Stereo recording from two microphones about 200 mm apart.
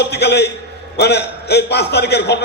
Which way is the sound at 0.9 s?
55° left (ahead or behind).